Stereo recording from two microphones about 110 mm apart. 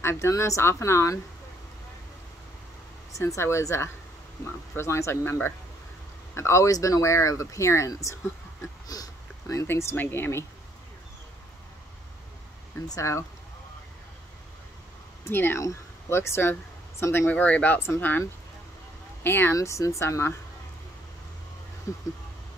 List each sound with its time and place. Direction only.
0.0 s speech: 25° left (ahead or behind)
3.1 s speech: 30° left (ahead or behind)
12.8 s speech: 30° left (ahead or behind)
15.2 s speech: 20° left (ahead or behind)
19.2 s speech: 20° left (ahead or behind)
21.9 s speech: 30° left (ahead or behind)